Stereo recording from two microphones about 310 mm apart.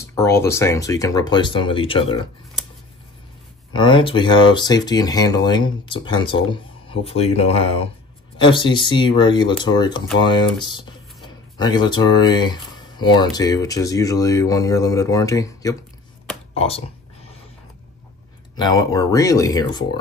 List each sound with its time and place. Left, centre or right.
0.0 s speech: centre
3.7 s speech: centre
18.6 s speech: centre